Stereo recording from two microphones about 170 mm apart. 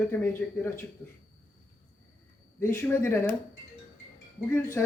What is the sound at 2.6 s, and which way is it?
Speech, 15° left (ahead or behind).